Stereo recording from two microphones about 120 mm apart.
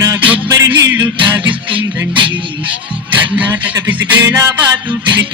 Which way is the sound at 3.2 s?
15° right (ahead or behind).